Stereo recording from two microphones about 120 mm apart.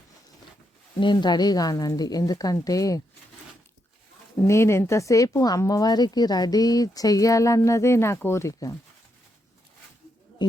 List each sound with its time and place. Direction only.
0.9 s speech: 40° left (ahead or behind)
4.4 s speech: 20° left (ahead or behind)